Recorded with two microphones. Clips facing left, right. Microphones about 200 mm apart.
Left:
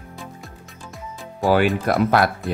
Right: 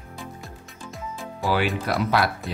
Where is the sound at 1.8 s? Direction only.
50° left (ahead or behind).